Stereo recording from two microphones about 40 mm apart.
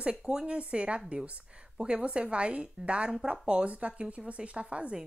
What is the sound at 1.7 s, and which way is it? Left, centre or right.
A woman's voice, right.